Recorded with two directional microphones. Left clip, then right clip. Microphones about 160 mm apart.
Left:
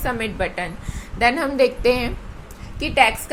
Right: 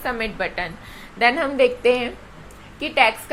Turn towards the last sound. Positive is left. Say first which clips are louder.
# left 1 dB
turn(degrees=15)  # may be behind; listen again after turning